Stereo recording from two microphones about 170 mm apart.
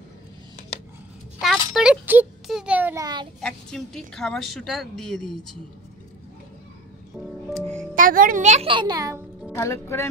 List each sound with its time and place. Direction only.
1.4 s a sound: centre (ahead or behind)
3.3 s a woman's voice: 5° left (ahead or behind)
7.9 s a child's voice: 55° right (ahead or behind)
8.6 s a child's voice: 25° right (ahead or behind)
9.5 s speech: 15° left (ahead or behind)